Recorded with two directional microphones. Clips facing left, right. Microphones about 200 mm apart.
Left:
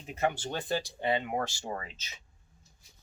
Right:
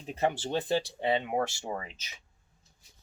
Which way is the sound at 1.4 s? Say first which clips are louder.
Right 3 dB; 20° right (ahead or behind).